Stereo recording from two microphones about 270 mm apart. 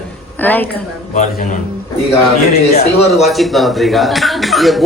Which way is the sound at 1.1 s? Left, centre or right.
Left.